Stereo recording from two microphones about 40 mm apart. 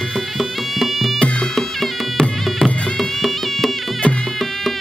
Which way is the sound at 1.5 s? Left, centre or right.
Centre.